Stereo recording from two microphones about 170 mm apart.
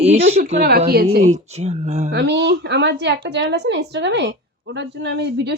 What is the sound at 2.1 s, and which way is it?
A woman's voice, 90° right.